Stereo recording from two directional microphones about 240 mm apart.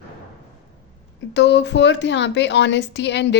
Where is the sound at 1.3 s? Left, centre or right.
Left.